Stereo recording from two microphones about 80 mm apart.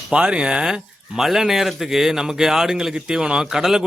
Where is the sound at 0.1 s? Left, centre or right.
Centre.